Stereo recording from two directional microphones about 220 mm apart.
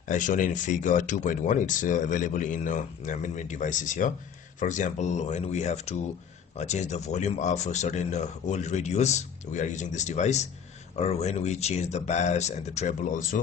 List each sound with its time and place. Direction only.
0.1 s speech: 35° left (ahead or behind)